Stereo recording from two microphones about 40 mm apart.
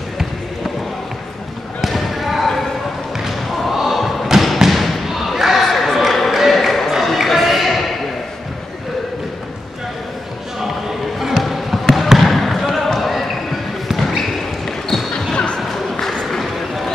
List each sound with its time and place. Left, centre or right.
1.8 s basketball bounce: centre
3.3 s thump: centre
11.1 s basketball bounce: centre
11.4 s music: centre
12.2 s basketball bounce: centre
15.3 s music: left
15.7 s a sound: centre